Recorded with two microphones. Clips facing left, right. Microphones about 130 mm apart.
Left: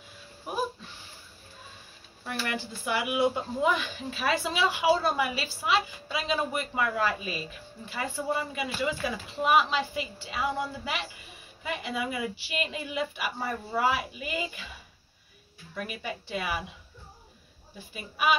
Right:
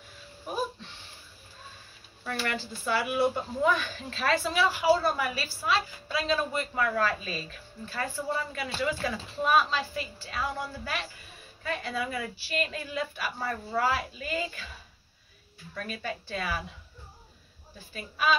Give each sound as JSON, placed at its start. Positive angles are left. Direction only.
{"t": 2.4, "sound": "speech", "side_deg": 15}
{"t": 15.7, "sound": "speech", "side_deg": 15}
{"t": 17.7, "sound": "speech", "side_deg": 15}